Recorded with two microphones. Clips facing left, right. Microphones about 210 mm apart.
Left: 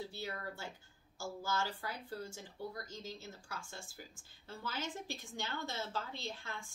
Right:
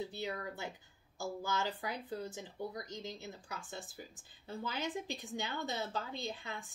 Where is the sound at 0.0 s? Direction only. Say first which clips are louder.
Right 3 dB; 20° right (ahead or behind).